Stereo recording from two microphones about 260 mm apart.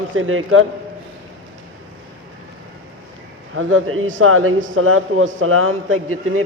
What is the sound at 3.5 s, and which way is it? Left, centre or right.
A man's voice, right.